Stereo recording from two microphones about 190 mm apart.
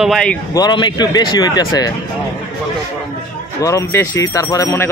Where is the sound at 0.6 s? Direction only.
25° left (ahead or behind).